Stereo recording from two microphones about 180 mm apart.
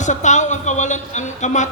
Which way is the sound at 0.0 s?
40° left (ahead or behind).